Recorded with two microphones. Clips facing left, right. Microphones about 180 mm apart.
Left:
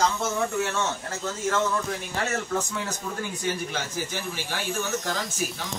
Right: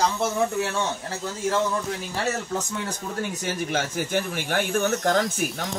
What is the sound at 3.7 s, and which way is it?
Speech, 55° right (ahead or behind).